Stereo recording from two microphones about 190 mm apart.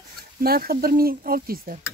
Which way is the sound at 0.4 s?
55° right (ahead or behind).